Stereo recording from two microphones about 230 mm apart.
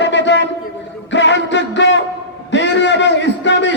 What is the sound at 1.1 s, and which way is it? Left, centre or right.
Music, left.